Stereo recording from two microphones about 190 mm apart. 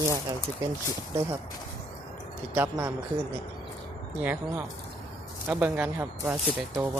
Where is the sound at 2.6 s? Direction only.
10° right (ahead or behind).